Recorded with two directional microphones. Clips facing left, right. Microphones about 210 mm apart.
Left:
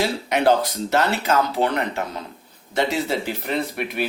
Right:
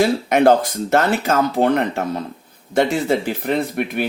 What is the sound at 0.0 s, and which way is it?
Speech, 50° right (ahead or behind).